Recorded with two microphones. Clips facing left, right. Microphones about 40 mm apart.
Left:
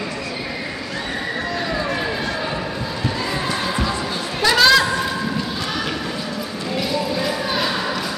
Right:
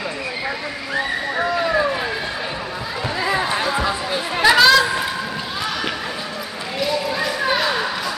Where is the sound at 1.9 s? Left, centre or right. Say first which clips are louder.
Even; centre.